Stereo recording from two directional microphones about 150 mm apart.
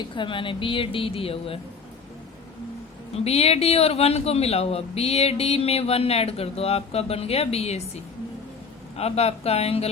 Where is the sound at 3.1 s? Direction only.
40° left (ahead or behind).